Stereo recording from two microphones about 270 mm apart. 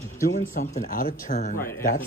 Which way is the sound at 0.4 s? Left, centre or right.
Left.